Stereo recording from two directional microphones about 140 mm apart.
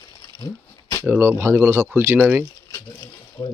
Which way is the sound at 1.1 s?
15° right (ahead or behind).